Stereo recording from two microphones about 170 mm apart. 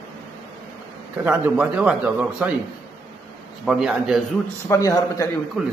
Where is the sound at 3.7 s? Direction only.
5° right (ahead or behind).